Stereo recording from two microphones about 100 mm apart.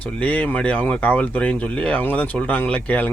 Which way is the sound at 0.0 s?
15° left (ahead or behind).